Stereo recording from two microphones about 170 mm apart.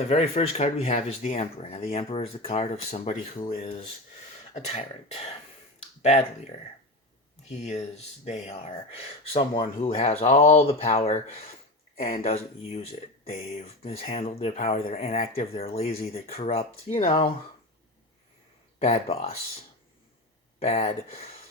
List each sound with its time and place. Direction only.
0.1 s speech: 35° left (ahead or behind)
4.5 s speech: 40° left (ahead or behind)
7.5 s speech: 40° left (ahead or behind)
18.8 s speech: 40° left (ahead or behind)